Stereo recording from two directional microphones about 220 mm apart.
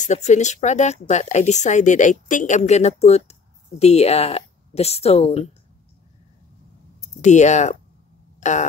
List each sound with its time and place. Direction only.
0.0 s speech: 30° left (ahead or behind)
7.2 s speech: 30° left (ahead or behind)
8.4 s a sound: 35° left (ahead or behind)